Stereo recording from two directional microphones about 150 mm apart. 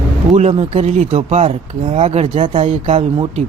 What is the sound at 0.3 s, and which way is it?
Speech, 45° right (ahead or behind).